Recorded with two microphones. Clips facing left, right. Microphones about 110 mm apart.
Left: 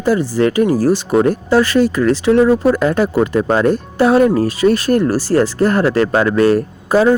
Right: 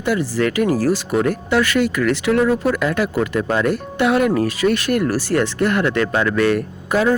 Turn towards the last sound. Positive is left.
turn(degrees=30)  # may be behind; listen again after turning